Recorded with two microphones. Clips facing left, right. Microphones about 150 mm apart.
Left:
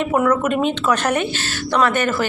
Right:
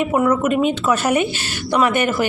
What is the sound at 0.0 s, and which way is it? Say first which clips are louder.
Speech: right 1 dB; 10° right (ahead or behind).